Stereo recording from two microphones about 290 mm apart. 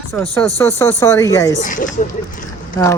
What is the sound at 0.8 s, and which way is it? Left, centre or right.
Speech, centre.